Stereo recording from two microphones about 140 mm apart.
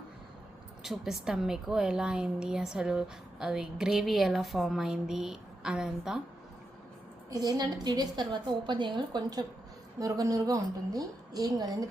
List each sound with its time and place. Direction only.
0.8 s a woman's voice: 5° right (ahead or behind)
7.3 s a woman's voice: 25° right (ahead or behind)